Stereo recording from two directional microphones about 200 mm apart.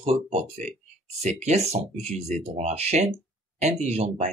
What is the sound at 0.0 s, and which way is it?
Speech, 30° right (ahead or behind).